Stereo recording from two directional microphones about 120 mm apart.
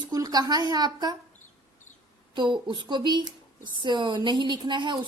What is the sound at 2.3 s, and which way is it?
A woman's voice, 40° right (ahead or behind).